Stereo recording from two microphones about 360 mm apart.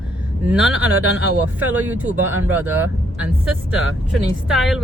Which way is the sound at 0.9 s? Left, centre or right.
Right.